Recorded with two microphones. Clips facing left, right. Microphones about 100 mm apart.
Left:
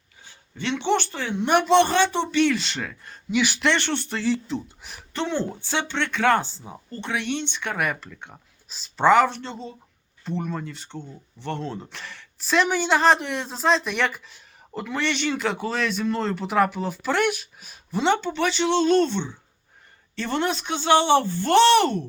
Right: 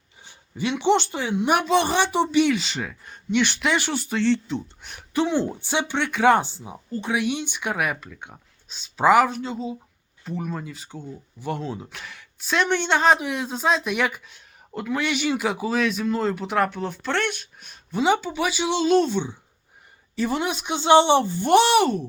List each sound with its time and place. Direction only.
0.3 s speech: 10° right (ahead or behind)
1.4 s speech: 5° right (ahead or behind)
3.7 s speech: 5° right (ahead or behind)
5.1 s speech: 10° right (ahead or behind)
6.7 s speech: 5° right (ahead or behind)